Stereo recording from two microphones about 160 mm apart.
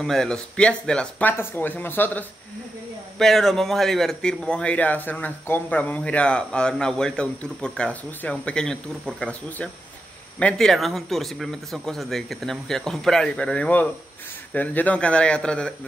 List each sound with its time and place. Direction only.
0.0 s speech: 5° left (ahead or behind)
3.2 s speech: centre (ahead or behind)